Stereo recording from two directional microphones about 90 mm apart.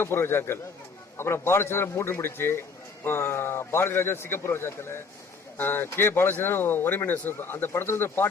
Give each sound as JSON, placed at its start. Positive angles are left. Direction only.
{"t": 0.0, "sound": "a man's voice", "side_deg": 25}